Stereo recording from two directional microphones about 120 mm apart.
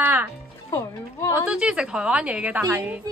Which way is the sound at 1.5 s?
10° right (ahead or behind).